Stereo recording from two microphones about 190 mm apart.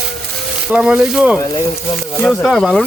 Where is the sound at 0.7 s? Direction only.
5° right (ahead or behind).